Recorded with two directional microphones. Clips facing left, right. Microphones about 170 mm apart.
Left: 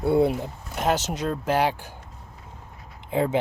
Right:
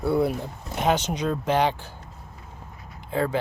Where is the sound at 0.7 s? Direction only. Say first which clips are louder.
Right 1 dB; 5° left (ahead or behind).